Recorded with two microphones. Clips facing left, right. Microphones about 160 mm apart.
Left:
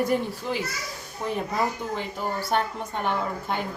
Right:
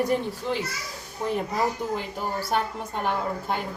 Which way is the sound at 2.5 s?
5° right (ahead or behind).